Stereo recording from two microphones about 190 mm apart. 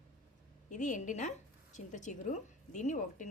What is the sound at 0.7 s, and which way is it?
A woman's voice, 40° left (ahead or behind).